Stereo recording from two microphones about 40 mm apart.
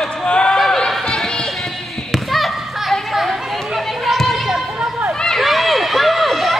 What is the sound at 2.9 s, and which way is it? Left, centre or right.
Chatter, centre.